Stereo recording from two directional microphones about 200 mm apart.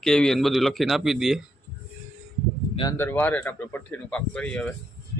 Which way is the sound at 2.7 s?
20° left (ahead or behind).